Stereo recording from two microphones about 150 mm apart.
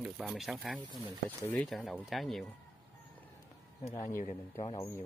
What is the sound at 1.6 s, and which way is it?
Speech, centre (ahead or behind).